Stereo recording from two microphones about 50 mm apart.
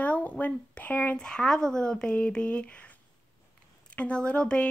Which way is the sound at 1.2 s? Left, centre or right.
Centre.